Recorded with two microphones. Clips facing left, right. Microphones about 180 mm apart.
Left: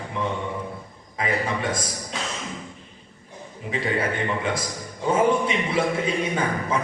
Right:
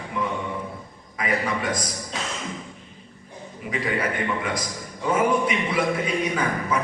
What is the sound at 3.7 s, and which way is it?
A man's voice, 30° left (ahead or behind).